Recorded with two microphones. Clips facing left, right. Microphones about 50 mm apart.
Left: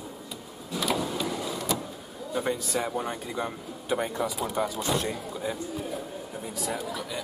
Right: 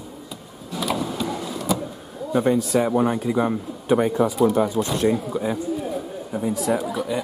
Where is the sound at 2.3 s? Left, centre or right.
Centre.